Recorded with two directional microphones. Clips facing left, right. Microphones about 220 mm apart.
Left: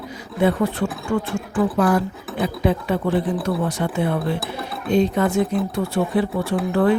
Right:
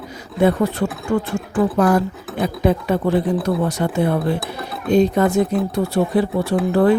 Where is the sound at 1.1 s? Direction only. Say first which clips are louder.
Right 3 dB; 40° right (ahead or behind).